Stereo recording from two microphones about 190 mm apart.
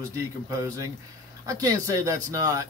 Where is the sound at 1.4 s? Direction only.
15° right (ahead or behind).